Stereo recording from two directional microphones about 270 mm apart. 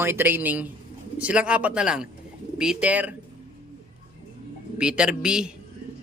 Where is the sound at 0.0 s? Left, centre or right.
Centre.